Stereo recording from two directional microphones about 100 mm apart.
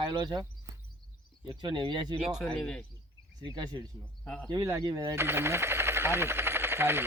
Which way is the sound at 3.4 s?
45° right (ahead or behind).